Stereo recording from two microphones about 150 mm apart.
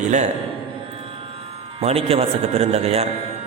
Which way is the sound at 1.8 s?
40° right (ahead or behind).